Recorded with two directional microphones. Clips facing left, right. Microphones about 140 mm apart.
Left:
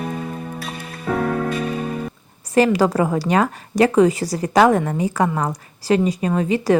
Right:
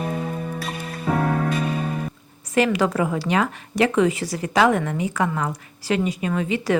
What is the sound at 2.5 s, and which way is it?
A woman's voice, 35° left (ahead or behind).